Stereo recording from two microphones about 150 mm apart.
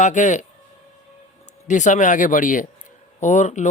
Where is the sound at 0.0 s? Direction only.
55° left (ahead or behind).